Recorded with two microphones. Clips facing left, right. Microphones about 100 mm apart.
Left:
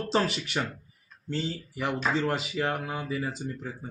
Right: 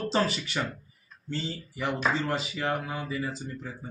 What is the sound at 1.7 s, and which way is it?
Speech, 10° left (ahead or behind).